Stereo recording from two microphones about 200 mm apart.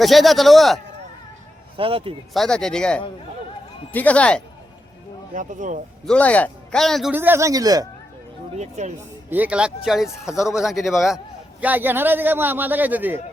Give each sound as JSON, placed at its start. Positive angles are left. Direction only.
{"t": 0.0, "sound": "a man's voice", "side_deg": 0}
{"t": 1.7, "sound": "speech", "side_deg": -25}
{"t": 2.3, "sound": "a man's voice", "side_deg": 0}
{"t": 5.3, "sound": "speech", "side_deg": -40}
{"t": 6.1, "sound": "a man's voice", "side_deg": 5}
{"t": 7.1, "sound": "a man's voice", "side_deg": -10}
{"t": 8.5, "sound": "speech", "side_deg": -35}
{"t": 9.0, "sound": "a man's voice", "side_deg": -10}